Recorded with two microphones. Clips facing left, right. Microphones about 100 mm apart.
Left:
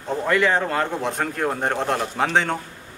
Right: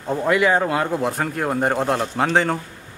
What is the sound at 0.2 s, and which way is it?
A man's voice, 5° right (ahead or behind).